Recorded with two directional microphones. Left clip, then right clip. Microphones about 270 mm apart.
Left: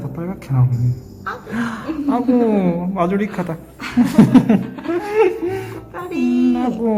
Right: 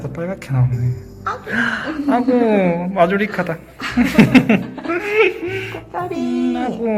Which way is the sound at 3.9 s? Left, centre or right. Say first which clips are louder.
Even; centre.